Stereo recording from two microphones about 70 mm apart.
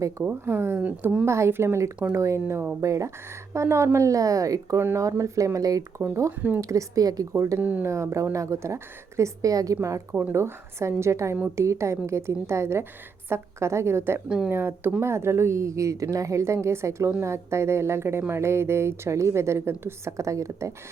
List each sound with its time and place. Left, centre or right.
0.4 s a woman's voice: right
0.8 s a woman's voice: right
1.2 s a woman's voice: right
6.3 s a woman's voice: right
6.6 s a woman's voice: right
7.6 s a woman's voice: right
7.9 s a woman's voice: right
10.1 s a woman's voice: right
10.3 s a woman's voice: right
14.3 s speech: centre
14.5 s a woman's voice: right